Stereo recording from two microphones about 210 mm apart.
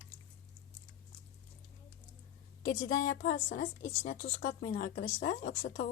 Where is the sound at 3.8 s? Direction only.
55° left (ahead or behind).